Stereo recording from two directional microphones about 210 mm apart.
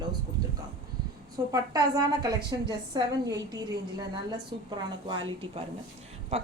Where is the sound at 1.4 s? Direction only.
15° right (ahead or behind).